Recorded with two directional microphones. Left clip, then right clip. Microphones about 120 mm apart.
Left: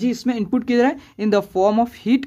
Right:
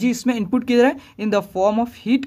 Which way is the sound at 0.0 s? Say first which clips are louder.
Right 1 dB; 5° right (ahead or behind).